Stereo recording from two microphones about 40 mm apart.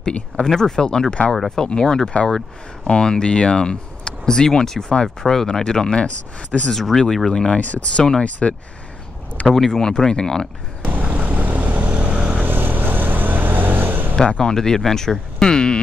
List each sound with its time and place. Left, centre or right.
0.6 s speech: centre
2.2 s speech: centre
6.7 s speech: centre
8.2 s speech: left
9.5 s speech: centre
10.8 s vehicle: right
12.1 s vehicle: right
12.4 s vehicle: right
14.4 s speech: centre